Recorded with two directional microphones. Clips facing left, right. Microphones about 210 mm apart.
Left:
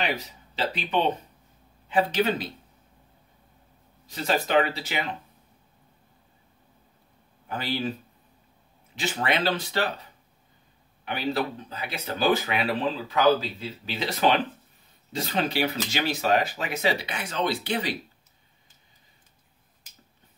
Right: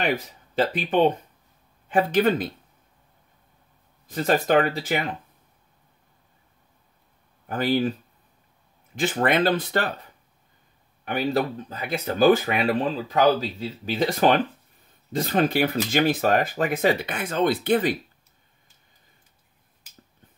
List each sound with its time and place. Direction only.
0.0 s speech: 50° right (ahead or behind)
4.1 s speech: 50° right (ahead or behind)
7.4 s speech: 50° right (ahead or behind)
8.9 s speech: 50° right (ahead or behind)
11.1 s speech: 45° right (ahead or behind)